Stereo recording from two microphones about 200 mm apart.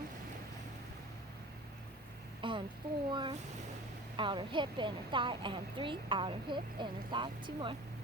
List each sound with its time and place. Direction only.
2.4 s a woman's voice: 25° right (ahead or behind)